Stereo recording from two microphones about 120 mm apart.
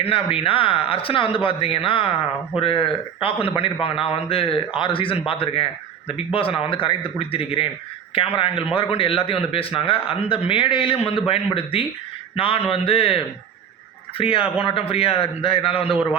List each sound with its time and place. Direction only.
0.0 s a man's voice: 50° left (ahead or behind)